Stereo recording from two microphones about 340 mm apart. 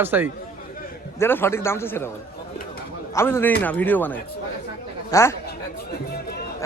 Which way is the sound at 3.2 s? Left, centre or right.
Centre.